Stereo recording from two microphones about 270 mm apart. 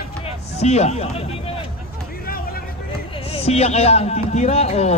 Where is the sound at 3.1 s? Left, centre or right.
Left.